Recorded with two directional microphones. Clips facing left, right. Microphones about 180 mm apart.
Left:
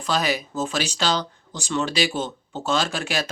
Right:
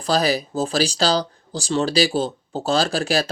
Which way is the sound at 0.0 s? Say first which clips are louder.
Right 4 dB; 35° right (ahead or behind).